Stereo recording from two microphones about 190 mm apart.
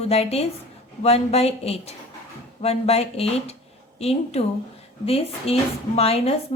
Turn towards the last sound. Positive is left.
turn(degrees=30)  # may be behind; listen again after turning